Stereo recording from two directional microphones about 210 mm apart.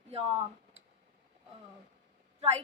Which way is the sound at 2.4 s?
30° right (ahead or behind).